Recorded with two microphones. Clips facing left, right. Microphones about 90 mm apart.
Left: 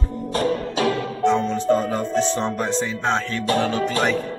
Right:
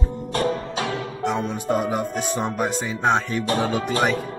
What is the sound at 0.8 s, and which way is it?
Speech, 10° right (ahead or behind).